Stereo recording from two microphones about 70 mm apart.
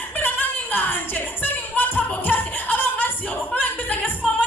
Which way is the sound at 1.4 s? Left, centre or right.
Left.